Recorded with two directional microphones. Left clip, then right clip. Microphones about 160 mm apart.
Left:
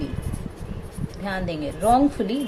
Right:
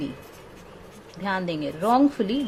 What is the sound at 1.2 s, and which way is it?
A woman's voice, 45° right (ahead or behind).